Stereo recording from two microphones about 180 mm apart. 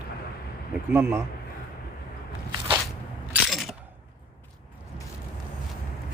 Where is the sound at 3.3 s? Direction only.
Centre (ahead or behind).